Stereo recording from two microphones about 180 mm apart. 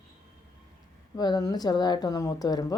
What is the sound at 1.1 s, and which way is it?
Speech, 20° left (ahead or behind).